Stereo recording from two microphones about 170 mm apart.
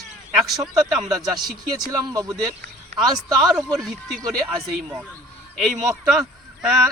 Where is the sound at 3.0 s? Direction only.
Centre (ahead or behind).